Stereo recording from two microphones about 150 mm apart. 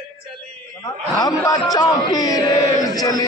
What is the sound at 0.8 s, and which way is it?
A man's voice, 25° left (ahead or behind).